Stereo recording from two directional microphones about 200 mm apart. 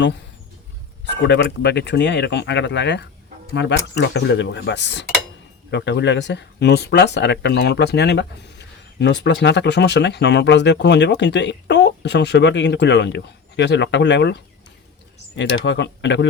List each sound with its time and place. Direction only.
1.1 s speech: 55° left (ahead or behind)